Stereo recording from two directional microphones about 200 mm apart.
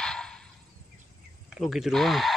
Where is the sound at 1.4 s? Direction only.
Centre (ahead or behind).